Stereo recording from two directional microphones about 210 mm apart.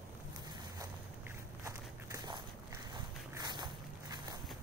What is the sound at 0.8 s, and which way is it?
Walk, 15° right (ahead or behind).